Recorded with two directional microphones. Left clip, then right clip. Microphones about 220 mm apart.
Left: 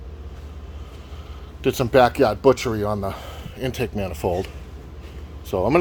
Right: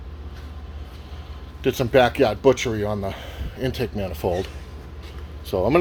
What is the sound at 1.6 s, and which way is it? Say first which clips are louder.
Speech: left 1 dB; 5° left (ahead or behind).